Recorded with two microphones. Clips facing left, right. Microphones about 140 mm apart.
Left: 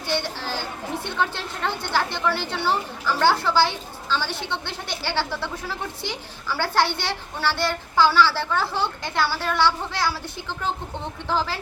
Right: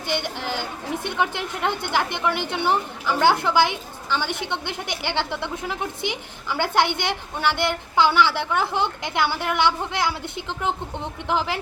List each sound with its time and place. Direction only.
0.1 s a woman's voice: 15° right (ahead or behind)